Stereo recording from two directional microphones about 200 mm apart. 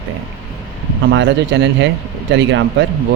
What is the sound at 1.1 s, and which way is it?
Speech, 60° right (ahead or behind).